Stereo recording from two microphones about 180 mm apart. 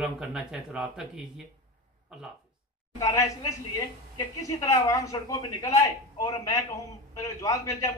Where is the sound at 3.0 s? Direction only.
20° left (ahead or behind).